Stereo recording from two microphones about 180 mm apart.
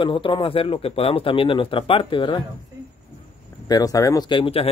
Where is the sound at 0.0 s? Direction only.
30° left (ahead or behind).